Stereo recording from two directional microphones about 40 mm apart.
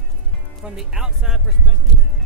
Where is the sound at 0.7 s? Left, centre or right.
Centre.